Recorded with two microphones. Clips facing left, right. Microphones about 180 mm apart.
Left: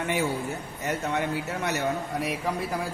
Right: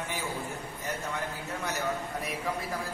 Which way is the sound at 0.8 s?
75° left (ahead or behind).